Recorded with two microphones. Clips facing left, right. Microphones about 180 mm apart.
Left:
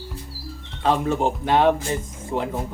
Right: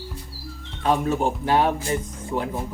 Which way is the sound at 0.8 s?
90° left.